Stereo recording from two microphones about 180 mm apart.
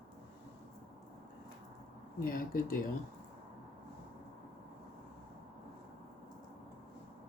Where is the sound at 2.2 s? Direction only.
50° left (ahead or behind).